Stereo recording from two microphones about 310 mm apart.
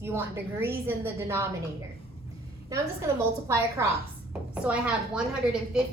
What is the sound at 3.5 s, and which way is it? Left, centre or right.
A woman's voice, centre.